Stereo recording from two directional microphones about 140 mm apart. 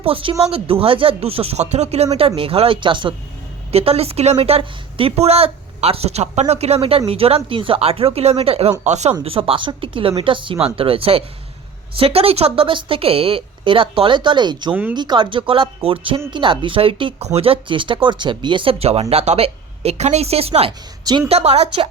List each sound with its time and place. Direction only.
0.0 s speech: 40° right (ahead or behind)
3.7 s speech: 45° right (ahead or behind)
9.2 s speech: 40° right (ahead or behind)
14.7 s speech: 15° right (ahead or behind)
14.9 s speech: 35° right (ahead or behind)
21.0 s a woman's voice: 30° right (ahead or behind)
21.2 s speech: 50° right (ahead or behind)